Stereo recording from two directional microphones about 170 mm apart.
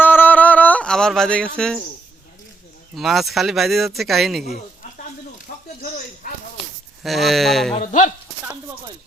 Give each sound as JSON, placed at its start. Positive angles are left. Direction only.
{"t": 0.0, "sound": "a sound", "side_deg": 10}
{"t": 1.5, "sound": "speech", "side_deg": 5}
{"t": 2.9, "sound": "speech", "side_deg": 0}
{"t": 5.5, "sound": "a sound", "side_deg": 55}
{"t": 7.0, "sound": "speech", "side_deg": 0}
{"t": 7.8, "sound": "speech", "side_deg": 50}